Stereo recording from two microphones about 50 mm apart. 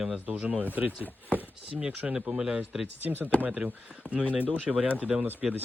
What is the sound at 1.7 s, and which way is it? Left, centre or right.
Speech, centre.